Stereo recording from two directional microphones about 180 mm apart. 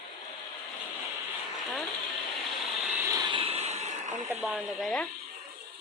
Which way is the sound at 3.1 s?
25° right (ahead or behind).